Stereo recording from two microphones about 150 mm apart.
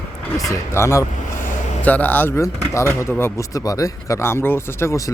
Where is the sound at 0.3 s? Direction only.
20° left (ahead or behind).